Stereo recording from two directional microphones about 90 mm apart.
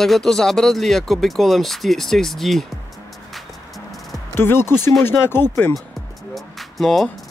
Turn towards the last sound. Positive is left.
turn(degrees=5)  # may be behind; listen again after turning